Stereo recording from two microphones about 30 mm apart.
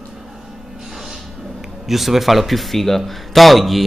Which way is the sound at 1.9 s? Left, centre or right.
Centre.